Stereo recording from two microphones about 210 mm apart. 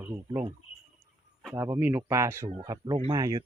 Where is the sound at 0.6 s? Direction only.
90° left.